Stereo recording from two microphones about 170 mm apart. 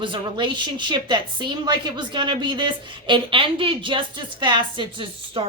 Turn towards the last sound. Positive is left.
turn(degrees=-30)  # may be behind; listen again after turning